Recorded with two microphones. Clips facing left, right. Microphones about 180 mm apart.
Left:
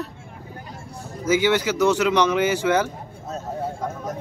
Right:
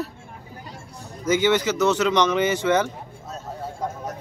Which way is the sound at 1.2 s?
10° left (ahead or behind).